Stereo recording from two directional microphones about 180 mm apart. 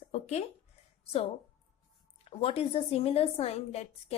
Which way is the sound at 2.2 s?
30° left (ahead or behind).